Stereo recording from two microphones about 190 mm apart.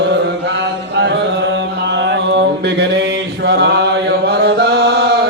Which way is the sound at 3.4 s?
60° right (ahead or behind).